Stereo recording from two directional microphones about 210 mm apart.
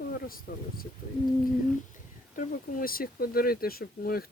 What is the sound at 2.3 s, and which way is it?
Speech, 40° left (ahead or behind).